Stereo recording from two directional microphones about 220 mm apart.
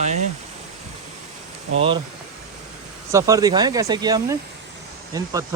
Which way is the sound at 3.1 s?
15° right (ahead or behind).